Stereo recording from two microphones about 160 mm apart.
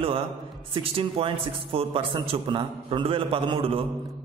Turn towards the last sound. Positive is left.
turn(degrees=-35)  # may be behind; listen again after turning